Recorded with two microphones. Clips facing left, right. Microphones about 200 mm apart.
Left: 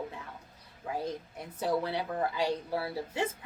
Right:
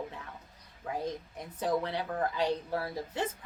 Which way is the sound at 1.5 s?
10° left (ahead or behind).